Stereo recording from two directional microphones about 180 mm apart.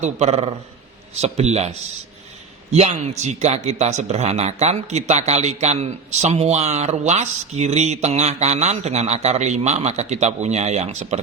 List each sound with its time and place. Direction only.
0.0 s a man's voice: 35° right (ahead or behind)
2.7 s a man's voice: 35° right (ahead or behind)